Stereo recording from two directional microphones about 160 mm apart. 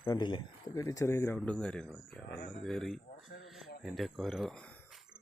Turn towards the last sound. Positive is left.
turn(degrees=5)  # may be behind; listen again after turning